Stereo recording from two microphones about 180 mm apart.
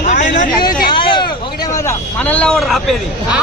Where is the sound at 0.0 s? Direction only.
40° left (ahead or behind).